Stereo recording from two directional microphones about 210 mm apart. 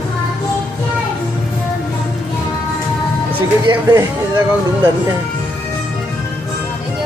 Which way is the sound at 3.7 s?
15° right (ahead or behind).